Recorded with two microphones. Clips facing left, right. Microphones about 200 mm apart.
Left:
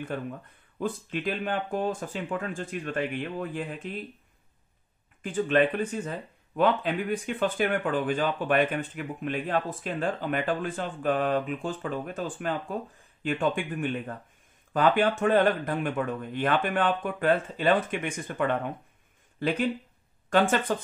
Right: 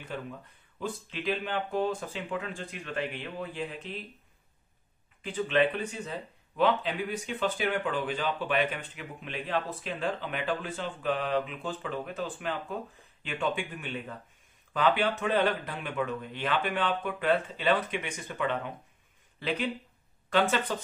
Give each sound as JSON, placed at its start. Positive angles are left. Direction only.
{"t": 0.0, "sound": "speech", "side_deg": 50}
{"t": 5.2, "sound": "speech", "side_deg": 50}